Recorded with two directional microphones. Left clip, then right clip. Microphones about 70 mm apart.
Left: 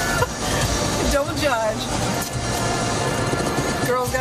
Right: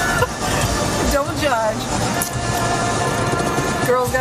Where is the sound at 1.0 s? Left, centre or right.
Centre.